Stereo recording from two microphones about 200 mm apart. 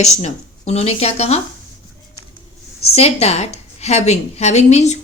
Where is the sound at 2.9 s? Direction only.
30° left (ahead or behind).